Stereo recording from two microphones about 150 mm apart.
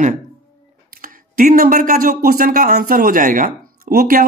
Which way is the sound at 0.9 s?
70° right (ahead or behind).